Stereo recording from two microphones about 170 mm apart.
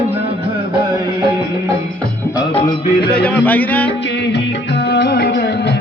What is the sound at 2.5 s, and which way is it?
Music, 35° left (ahead or behind).